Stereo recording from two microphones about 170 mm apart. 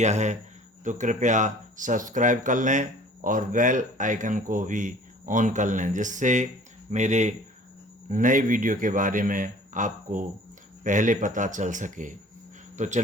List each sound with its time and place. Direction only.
0.0 s speech: 45° right (ahead or behind)